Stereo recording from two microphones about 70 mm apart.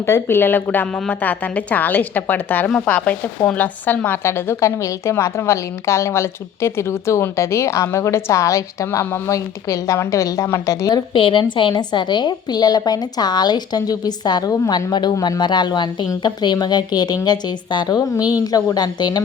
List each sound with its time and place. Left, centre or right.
0.0 s speech: left
2.6 s speech: centre
4.2 s a woman's voice: left
11.7 s a woman's voice: left